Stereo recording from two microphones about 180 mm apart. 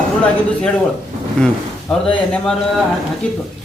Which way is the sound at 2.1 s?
5° left (ahead or behind).